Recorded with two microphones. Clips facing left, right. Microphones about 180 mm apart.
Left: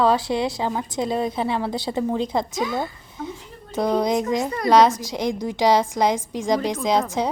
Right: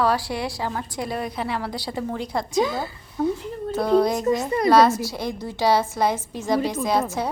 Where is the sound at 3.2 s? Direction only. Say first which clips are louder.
Right 9 dB; 40° right (ahead or behind).